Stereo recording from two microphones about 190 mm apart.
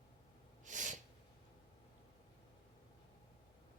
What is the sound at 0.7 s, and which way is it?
Sneeze, 40° right (ahead or behind).